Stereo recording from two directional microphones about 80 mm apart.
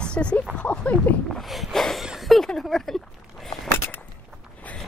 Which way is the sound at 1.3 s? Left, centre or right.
Centre.